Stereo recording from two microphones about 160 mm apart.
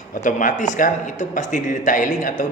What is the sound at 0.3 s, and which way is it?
A man's voice, 55° left (ahead or behind).